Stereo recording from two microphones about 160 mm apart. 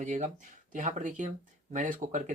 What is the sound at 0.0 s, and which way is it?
Speech, 50° right (ahead or behind).